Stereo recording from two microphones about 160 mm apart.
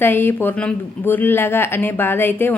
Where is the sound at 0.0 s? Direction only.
15° left (ahead or behind).